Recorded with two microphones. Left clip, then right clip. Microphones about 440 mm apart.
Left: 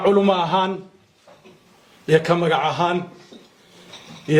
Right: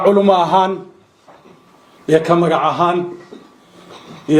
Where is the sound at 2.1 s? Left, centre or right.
Left.